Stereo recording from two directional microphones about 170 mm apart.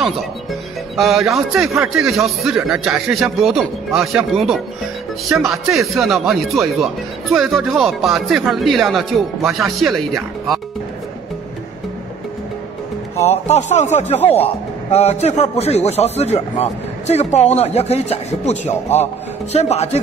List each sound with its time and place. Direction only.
0.9 s speech: centre (ahead or behind)
13.1 s a man's voice: 40° left (ahead or behind)